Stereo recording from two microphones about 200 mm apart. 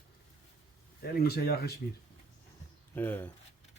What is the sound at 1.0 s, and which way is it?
Speech, 50° left (ahead or behind).